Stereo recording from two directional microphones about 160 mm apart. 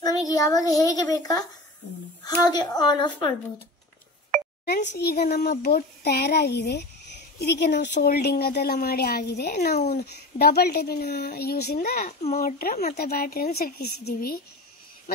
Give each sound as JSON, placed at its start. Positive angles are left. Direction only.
{"t": 0.0, "sound": "a child's voice", "side_deg": 20}
{"t": 4.6, "sound": "a child's voice", "side_deg": 85}
{"t": 9.8, "sound": "speech", "side_deg": 45}
{"t": 10.4, "sound": "speech", "side_deg": 85}
{"t": 12.9, "sound": "speech", "side_deg": 75}